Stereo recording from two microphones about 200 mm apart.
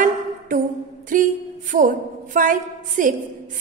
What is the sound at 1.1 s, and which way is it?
A woman's voice, 45° right (ahead or behind).